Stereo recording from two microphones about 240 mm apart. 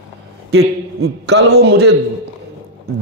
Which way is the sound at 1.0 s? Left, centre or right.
Right.